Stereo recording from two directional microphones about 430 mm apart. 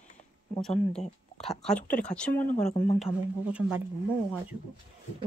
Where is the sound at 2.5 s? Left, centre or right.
Centre.